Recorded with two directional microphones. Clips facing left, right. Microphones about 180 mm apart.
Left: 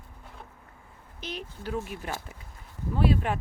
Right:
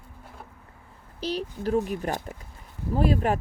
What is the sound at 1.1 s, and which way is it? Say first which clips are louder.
Speech: right 9 dB; 35° right (ahead or behind).